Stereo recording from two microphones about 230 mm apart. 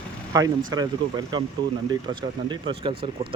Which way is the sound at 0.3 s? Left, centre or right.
Centre.